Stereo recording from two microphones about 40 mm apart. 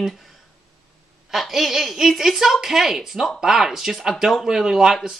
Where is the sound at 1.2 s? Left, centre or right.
Centre.